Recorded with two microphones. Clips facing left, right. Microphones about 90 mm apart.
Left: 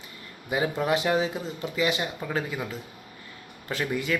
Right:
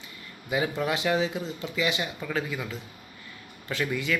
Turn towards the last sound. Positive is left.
turn(degrees=35)  # may be behind; listen again after turning